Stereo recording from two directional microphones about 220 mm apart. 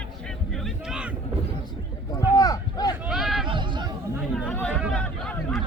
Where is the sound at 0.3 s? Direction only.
Centre (ahead or behind).